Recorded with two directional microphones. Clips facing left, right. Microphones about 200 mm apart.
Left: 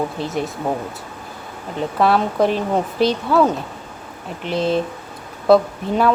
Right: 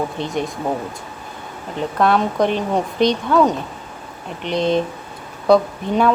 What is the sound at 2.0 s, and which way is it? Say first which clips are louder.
A woman's voice: even; 5° left (ahead or behind).